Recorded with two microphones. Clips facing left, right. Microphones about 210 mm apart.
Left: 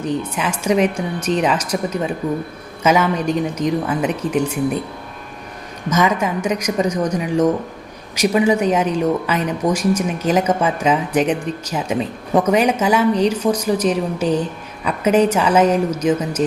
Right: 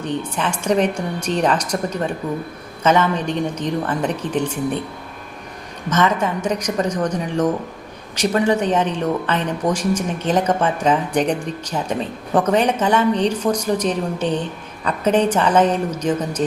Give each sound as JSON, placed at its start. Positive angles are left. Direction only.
{"t": 0.2, "sound": "a woman's voice", "side_deg": 5}
{"t": 5.9, "sound": "a woman's voice", "side_deg": 10}